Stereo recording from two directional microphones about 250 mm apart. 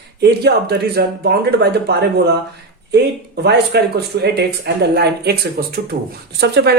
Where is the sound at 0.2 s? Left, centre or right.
Right.